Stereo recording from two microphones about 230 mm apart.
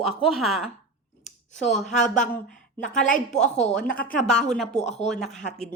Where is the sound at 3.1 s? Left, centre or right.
Left.